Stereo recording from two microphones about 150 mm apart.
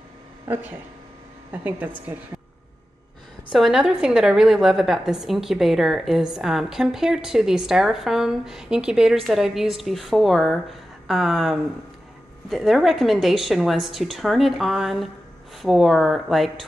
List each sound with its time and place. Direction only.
0.5 s a woman's voice: 10° right (ahead or behind)
3.5 s a woman's voice: 5° right (ahead or behind)